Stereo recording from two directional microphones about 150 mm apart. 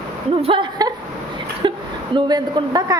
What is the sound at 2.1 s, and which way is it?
Speech, 30° right (ahead or behind).